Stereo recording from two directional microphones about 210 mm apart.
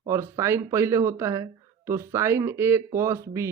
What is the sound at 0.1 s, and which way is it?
Speech, 15° right (ahead or behind).